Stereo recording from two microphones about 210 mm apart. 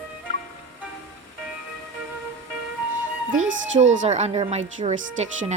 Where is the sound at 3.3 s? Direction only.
65° right (ahead or behind).